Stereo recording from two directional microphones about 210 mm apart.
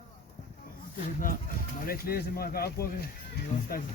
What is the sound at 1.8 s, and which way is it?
Speech, 45° left (ahead or behind).